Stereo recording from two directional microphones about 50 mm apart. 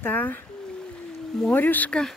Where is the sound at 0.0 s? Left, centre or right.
Left.